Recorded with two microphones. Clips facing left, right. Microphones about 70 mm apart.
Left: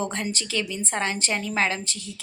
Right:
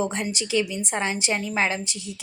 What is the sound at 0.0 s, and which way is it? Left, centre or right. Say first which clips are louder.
A woman's voice: right 2 dB; centre.